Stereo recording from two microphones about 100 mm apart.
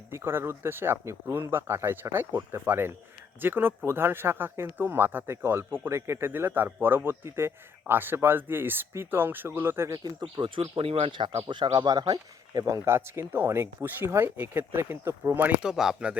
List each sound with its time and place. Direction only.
0.1 s speech: 25° right (ahead or behind)
10.0 s speech: 45° right (ahead or behind)
10.4 s speech: 65° right (ahead or behind)
11.3 s speech: 50° right (ahead or behind); by 15.5 s 20° right (ahead or behind)
15.6 s speech: 5° right (ahead or behind)